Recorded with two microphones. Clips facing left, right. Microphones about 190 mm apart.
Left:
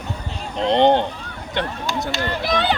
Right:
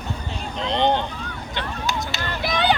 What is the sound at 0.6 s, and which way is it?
Speech, 60° left (ahead or behind).